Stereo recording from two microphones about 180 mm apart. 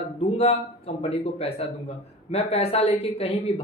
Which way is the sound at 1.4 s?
35° left (ahead or behind).